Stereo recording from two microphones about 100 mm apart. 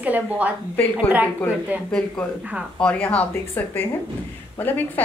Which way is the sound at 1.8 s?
10° left (ahead or behind).